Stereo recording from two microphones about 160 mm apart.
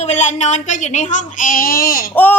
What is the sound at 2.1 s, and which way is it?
Speech, 10° left (ahead or behind).